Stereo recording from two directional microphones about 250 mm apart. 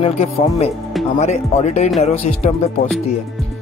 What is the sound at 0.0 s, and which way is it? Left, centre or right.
Speech, left.